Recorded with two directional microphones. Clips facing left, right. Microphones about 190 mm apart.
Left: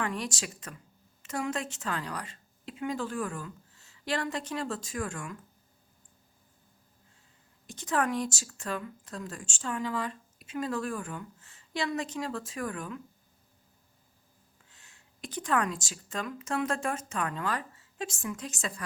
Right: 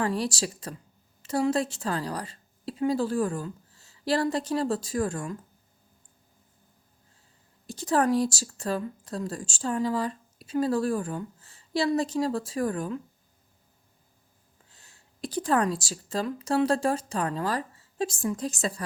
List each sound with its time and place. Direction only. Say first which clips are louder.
0.0 s a woman's voice: right 6 dB; 35° right (ahead or behind)
7.7 s speech: right 6 dB; 35° right (ahead or behind)
14.7 s speech: right 2 dB; 35° right (ahead or behind)